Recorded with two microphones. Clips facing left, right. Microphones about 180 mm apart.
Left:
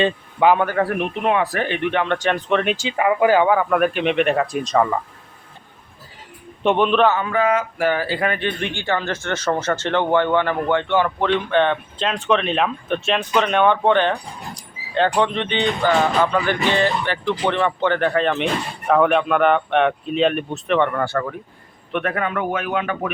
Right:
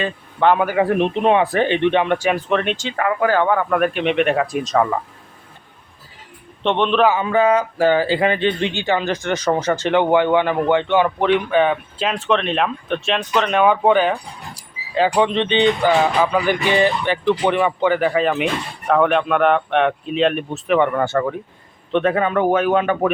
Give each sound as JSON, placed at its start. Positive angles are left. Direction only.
{"t": 0.3, "sound": "a man's voice", "side_deg": 5}
{"t": 0.6, "sound": "speech", "side_deg": -10}
{"t": 6.6, "sound": "a man's voice", "side_deg": 5}
{"t": 7.0, "sound": "speech", "side_deg": -10}
{"t": 7.3, "sound": "speech", "side_deg": -30}
{"t": 15.9, "sound": "speech", "side_deg": -10}
{"t": 21.0, "sound": "a man's voice", "side_deg": -20}